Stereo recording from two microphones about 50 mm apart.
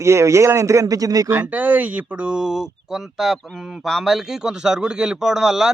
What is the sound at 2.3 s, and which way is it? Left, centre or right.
Speech, centre.